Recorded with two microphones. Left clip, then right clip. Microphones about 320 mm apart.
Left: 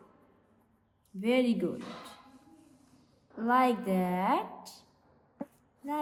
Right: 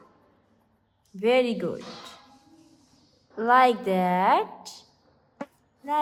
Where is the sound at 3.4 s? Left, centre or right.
Right.